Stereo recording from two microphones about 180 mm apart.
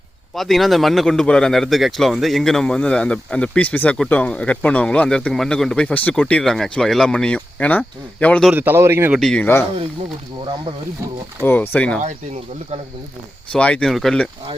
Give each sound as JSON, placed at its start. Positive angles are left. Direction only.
{"t": 0.3, "sound": "speech", "side_deg": 0}
{"t": 8.5, "sound": "speech", "side_deg": -10}
{"t": 9.1, "sound": "speech", "side_deg": 5}
{"t": 11.4, "sound": "speech", "side_deg": 10}
{"t": 12.0, "sound": "speech", "side_deg": -40}
{"t": 13.5, "sound": "speech", "side_deg": 5}